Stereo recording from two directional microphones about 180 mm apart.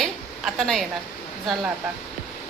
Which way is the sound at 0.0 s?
Centre (ahead or behind).